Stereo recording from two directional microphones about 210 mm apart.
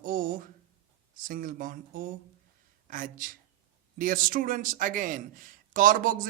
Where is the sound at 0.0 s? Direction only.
40° right (ahead or behind).